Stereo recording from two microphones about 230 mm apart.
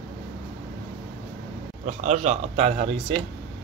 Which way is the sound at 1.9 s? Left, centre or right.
Right.